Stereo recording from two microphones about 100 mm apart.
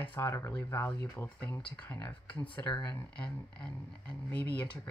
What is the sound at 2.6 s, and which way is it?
Speech, 45° left (ahead or behind).